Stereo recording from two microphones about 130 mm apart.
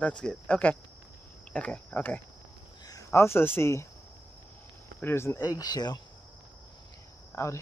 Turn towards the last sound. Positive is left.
turn(degrees=20)  # may be behind; listen again after turning